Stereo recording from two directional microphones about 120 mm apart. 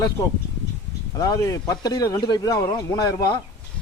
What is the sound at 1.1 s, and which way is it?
Speech, 30° left (ahead or behind).